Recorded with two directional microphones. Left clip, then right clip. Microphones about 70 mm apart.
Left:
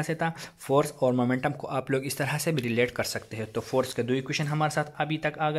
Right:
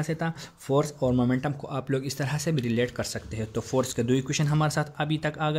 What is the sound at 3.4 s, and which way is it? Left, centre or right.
Speech, right.